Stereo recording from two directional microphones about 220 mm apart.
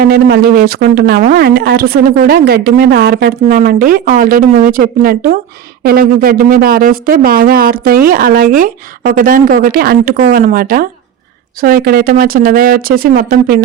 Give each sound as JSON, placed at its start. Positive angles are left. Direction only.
{"t": 0.0, "sound": "speech", "side_deg": -45}